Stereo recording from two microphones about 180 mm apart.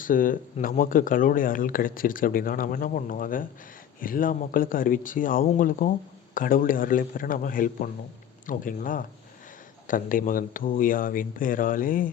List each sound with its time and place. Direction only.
0.0 s speech: 50° left (ahead or behind)